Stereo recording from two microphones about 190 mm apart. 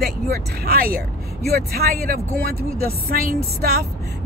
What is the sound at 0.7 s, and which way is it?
Speech, 50° right (ahead or behind).